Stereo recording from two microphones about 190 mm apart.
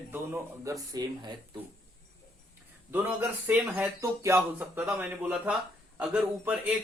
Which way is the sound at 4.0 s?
15° right (ahead or behind).